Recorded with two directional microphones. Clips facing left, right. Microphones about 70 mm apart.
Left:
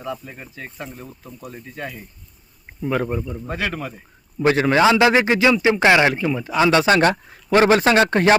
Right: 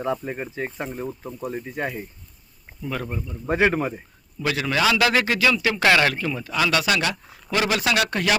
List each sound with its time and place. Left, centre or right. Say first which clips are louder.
0.0 s speech: right 5 dB; right
2.8 s speech: left 7 dB; left
3.4 s speech: right 6 dB; right
4.4 s a man's voice: left 7 dB; left